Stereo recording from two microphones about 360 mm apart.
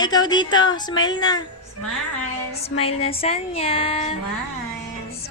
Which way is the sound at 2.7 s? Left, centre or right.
Centre.